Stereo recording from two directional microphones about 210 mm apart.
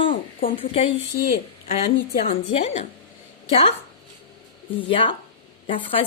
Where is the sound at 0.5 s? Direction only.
25° left (ahead or behind).